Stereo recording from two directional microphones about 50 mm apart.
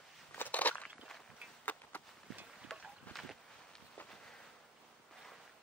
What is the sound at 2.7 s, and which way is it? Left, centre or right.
Boat, centre.